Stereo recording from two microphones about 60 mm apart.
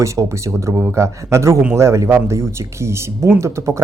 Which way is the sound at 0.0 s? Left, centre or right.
Right.